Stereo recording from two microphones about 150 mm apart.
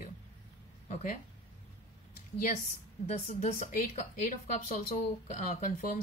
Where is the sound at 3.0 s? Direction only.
45° left (ahead or behind).